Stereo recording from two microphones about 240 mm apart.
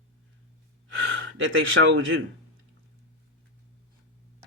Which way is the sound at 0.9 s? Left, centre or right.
Right.